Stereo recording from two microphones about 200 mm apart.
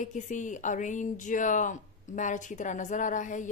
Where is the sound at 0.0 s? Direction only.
40° left (ahead or behind).